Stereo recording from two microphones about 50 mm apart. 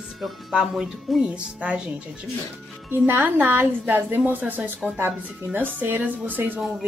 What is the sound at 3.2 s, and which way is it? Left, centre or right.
A woman's voice, right.